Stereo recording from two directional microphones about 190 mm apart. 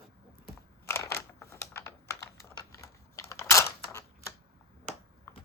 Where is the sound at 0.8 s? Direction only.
15° left (ahead or behind).